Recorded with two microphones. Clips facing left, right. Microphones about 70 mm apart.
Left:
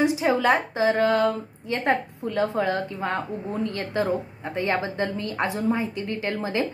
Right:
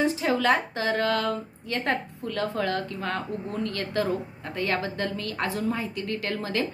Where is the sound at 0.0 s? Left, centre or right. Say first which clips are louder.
Left 3 dB; centre.